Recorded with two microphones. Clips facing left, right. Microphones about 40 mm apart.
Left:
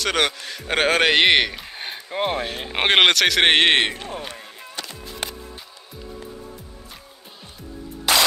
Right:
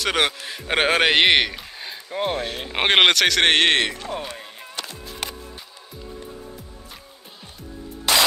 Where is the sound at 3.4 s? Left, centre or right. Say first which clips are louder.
Left 3 dB; centre.